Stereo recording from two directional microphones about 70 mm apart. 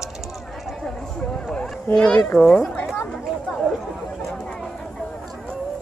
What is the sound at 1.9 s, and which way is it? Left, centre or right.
Speech, centre.